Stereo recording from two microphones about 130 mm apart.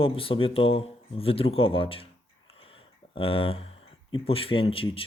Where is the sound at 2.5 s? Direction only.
45° left (ahead or behind).